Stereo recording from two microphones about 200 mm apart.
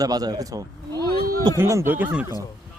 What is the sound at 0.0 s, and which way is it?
Speech, 20° right (ahead or behind).